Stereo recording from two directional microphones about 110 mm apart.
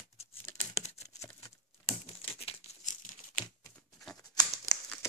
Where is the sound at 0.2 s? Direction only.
70° left (ahead or behind).